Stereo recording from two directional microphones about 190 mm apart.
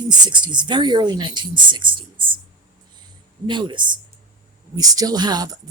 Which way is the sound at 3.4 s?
25° right (ahead or behind).